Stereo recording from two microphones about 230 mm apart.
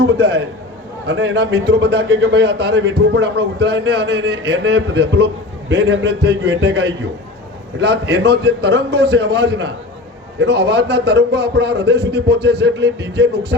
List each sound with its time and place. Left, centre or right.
0.0 s a man's voice: right